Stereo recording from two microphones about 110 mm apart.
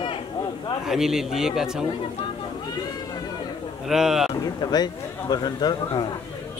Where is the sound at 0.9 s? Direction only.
5° right (ahead or behind).